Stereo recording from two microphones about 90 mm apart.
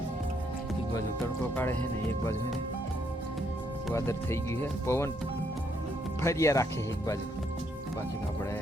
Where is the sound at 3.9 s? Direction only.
30° left (ahead or behind).